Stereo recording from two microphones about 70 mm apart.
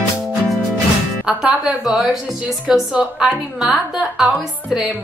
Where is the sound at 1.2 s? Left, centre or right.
Centre.